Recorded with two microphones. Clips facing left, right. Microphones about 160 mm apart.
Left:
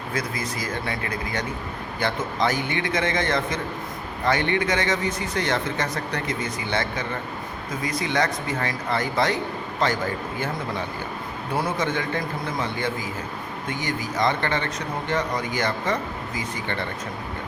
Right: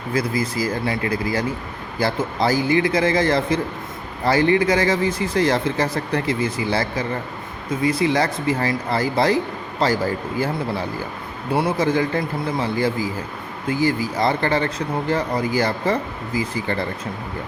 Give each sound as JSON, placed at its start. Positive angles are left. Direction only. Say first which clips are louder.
{"t": 0.1, "sound": "speech", "louder": "right 8 dB", "side_deg": -30}
{"t": 11.5, "sound": "speech", "louder": "right 6 dB", "side_deg": -35}